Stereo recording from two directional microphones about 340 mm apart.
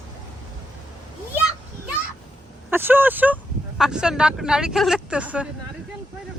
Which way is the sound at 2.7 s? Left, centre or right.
Centre.